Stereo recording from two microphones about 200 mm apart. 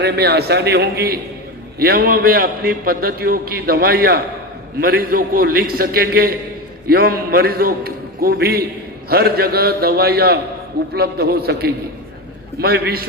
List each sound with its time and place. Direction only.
0.0 s a man's voice: 55° right (ahead or behind)